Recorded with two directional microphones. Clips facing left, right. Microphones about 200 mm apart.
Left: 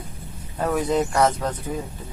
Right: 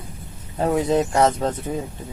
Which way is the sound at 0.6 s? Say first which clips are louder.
Right 2 dB; 25° right (ahead or behind).